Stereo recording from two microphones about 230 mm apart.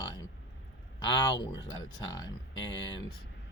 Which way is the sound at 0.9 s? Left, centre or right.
Centre.